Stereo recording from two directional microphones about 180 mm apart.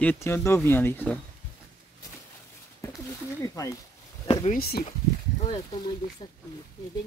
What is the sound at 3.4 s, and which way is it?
Speech, 20° left (ahead or behind).